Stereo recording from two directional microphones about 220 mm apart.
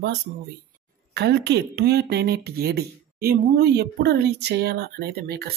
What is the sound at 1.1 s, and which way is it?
Speech, 50° right (ahead or behind).